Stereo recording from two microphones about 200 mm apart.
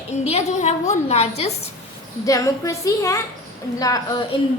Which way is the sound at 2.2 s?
15° left (ahead or behind).